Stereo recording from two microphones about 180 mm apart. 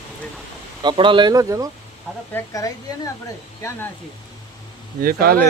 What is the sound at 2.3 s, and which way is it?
Speech, 20° left (ahead or behind).